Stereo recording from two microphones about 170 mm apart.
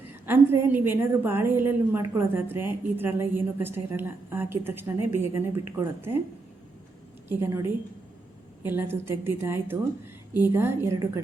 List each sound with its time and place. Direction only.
0.3 s a woman's voice: 10° right (ahead or behind)
7.3 s a woman's voice: 15° right (ahead or behind)